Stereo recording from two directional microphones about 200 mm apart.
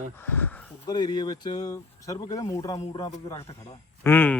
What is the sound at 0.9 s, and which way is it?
A man's voice, 20° left (ahead or behind).